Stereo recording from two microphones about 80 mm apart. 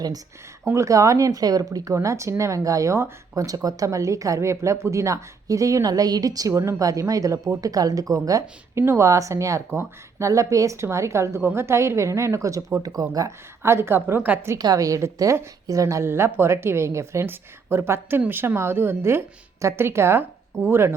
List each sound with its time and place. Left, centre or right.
0.6 s speech: right
6.5 s speech: right
8.8 s a woman's voice: right
13.6 s a woman's voice: right
14.6 s a woman's voice: right